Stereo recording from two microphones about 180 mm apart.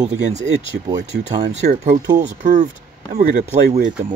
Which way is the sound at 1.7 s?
45° right (ahead or behind).